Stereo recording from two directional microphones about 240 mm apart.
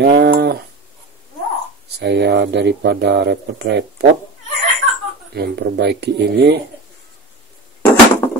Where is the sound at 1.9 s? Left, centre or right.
Right.